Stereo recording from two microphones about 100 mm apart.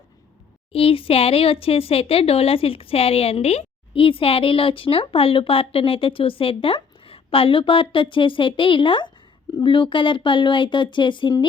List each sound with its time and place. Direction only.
0.7 s speech: 70° left (ahead or behind); by 11.4 s 50° left (ahead or behind)